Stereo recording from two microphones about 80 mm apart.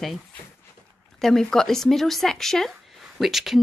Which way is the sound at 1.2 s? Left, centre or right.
Centre.